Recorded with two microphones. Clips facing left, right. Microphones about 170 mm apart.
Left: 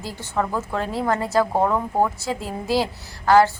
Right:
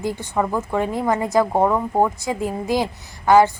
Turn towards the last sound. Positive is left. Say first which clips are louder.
# right 2 dB
turn(degrees=-15)  # may be behind; listen again after turning